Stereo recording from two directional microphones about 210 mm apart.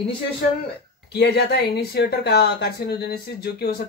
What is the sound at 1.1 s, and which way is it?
A woman's voice, 50° left (ahead or behind).